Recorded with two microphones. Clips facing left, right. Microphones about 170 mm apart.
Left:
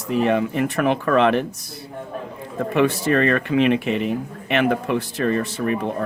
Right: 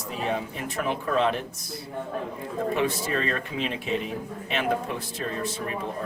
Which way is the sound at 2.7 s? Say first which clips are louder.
Left 10 dB; 70° left (ahead or behind).